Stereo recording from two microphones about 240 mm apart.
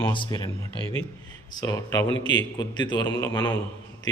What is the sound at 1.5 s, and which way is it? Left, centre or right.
A man's voice, centre.